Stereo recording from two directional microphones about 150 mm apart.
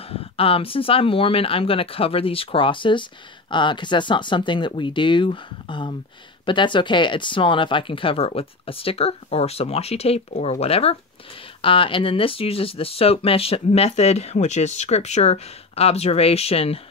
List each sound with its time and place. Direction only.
0.1 s speech: 40° left (ahead or behind)